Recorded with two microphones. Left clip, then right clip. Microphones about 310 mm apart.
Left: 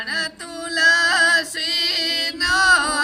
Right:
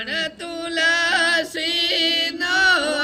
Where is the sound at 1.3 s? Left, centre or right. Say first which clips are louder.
Left 1 dB; centre.